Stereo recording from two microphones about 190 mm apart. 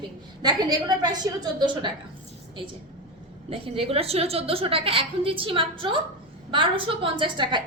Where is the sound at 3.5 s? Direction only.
30° right (ahead or behind).